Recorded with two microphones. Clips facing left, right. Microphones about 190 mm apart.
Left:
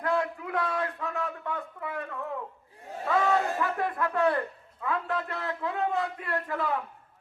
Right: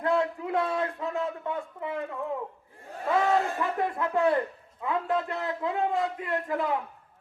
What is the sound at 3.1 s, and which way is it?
A man's voice, 20° right (ahead or behind).